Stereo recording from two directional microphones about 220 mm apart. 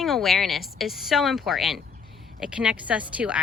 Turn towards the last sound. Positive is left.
turn(degrees=-5)  # may be behind; listen again after turning